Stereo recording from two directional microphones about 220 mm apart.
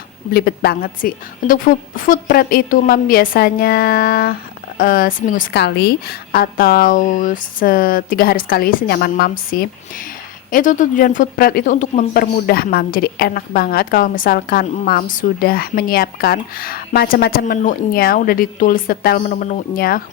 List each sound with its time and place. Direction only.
0.3 s a woman's voice: 45° left (ahead or behind)